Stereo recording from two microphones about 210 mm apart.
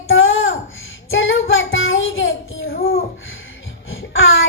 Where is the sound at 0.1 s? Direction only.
70° left (ahead or behind).